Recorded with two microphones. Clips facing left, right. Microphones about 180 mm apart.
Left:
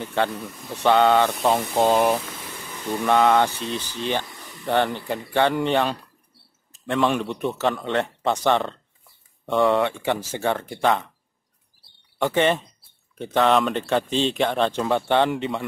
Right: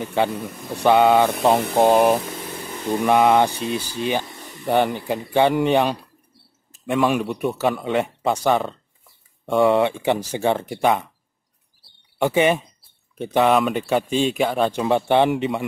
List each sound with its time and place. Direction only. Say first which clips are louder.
0.0 s speech: right 3 dB; 10° right (ahead or behind)
9.6 s speech: right 3 dB; 15° right (ahead or behind)
12.2 s speech: right 2 dB; 10° right (ahead or behind)
13.5 s speech: right 2 dB; 5° right (ahead or behind)